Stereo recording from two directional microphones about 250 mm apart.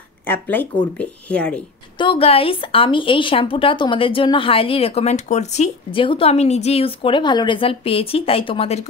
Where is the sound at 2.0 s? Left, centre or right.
Left.